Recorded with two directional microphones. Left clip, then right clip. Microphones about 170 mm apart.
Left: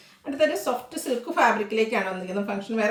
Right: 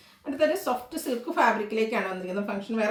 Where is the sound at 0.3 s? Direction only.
15° left (ahead or behind).